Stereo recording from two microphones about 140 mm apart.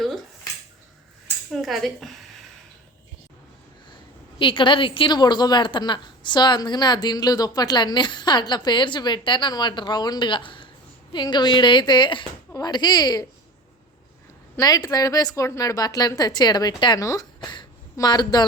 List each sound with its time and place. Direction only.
1.5 s a woman's voice: centre (ahead or behind)
4.4 s a woman's voice: 35° left (ahead or behind)
14.6 s a woman's voice: 25° left (ahead or behind)